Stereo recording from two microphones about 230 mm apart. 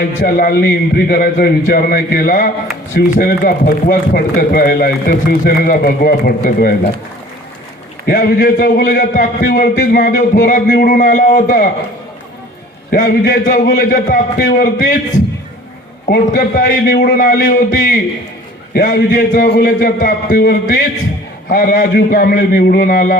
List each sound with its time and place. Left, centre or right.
0.3 s speech: left
8.0 s speech: left
12.9 s speech: left
16.0 s speech: left